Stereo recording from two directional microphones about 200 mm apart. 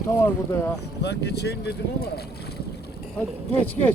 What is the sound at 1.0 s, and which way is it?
Speech, 55° left (ahead or behind).